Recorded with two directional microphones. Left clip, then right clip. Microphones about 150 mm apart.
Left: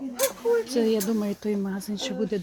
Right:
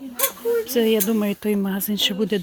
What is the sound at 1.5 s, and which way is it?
Speech, 40° right (ahead or behind).